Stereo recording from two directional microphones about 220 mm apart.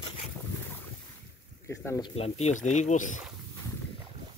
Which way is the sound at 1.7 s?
15° left (ahead or behind).